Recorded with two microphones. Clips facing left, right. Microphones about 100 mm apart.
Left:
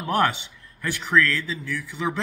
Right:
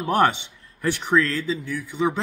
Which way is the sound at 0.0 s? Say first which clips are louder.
Right 3 dB; 20° right (ahead or behind).